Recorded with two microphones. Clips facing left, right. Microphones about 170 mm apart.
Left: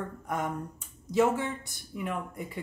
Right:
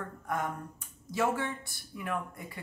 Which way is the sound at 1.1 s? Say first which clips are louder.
Left 5 dB; 20° left (ahead or behind).